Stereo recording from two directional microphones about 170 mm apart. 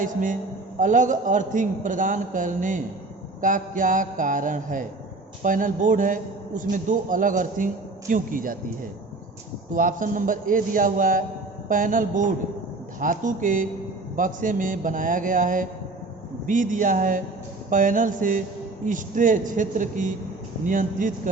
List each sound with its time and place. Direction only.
0.0 s a man's voice: 50° right (ahead or behind)
9.7 s a man's voice: 50° right (ahead or behind)